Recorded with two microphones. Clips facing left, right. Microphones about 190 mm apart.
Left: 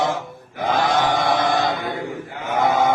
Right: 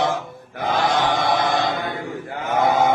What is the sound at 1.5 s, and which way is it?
Chant, 45° left (ahead or behind).